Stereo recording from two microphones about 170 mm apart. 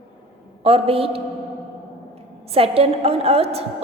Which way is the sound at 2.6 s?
35° right (ahead or behind).